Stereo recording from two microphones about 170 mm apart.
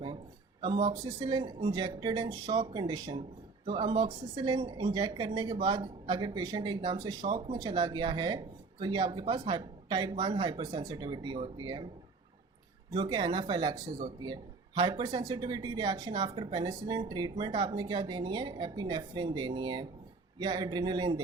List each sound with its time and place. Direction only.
0.6 s speech: 25° right (ahead or behind)
12.9 s speech: 25° right (ahead or behind)